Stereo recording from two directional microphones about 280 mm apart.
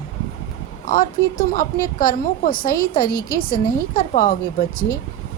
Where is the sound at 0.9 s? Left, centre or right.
Left.